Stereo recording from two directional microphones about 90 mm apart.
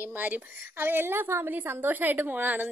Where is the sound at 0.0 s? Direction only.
20° right (ahead or behind).